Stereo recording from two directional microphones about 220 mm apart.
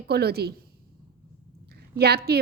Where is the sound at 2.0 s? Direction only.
45° right (ahead or behind).